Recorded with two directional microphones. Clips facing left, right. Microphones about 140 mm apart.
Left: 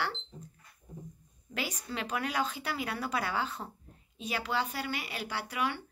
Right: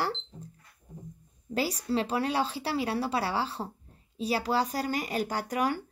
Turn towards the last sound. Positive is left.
turn(degrees=-40)  # may be behind; listen again after turning